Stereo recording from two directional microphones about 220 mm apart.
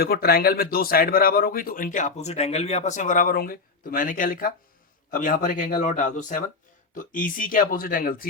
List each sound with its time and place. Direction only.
0.0 s speech: 45° left (ahead or behind)